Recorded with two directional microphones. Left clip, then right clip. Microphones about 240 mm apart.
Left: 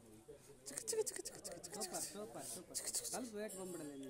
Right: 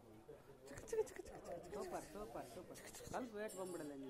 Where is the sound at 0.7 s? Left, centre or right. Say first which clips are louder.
Left 1 dB; left.